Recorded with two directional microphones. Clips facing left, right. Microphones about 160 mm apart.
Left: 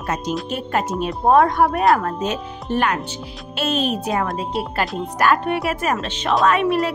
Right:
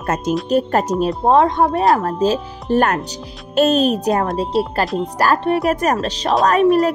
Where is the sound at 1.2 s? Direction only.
25° right (ahead or behind).